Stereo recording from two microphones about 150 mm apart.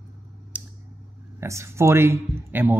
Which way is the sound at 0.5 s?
10° right (ahead or behind).